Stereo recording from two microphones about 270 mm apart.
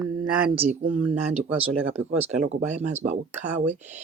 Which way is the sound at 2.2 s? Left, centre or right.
Right.